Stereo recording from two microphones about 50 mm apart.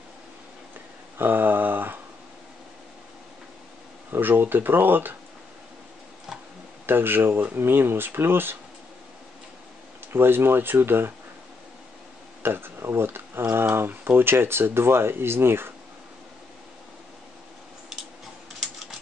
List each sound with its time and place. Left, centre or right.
1.1 s a sound: right
4.1 s speech: right
6.9 s speech: right
10.1 s speech: right
12.4 s speech: right